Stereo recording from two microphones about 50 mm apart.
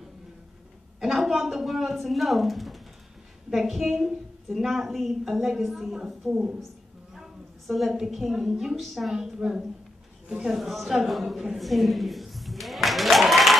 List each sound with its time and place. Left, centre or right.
1.0 s a woman's voice: centre
7.6 s a woman's voice: centre
9.1 s a woman's voice: centre